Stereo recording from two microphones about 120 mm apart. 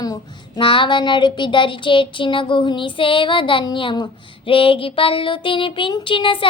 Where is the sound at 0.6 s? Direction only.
45° left (ahead or behind).